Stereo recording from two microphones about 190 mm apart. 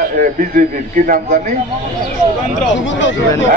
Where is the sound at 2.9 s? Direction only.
75° left (ahead or behind).